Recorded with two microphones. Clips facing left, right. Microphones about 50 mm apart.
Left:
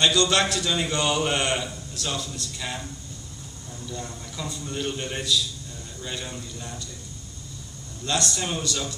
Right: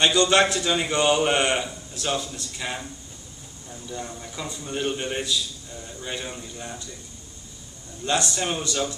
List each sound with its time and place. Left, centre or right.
0.0 s a man's voice: right
3.8 s a man's voice: centre
8.0 s a man's voice: centre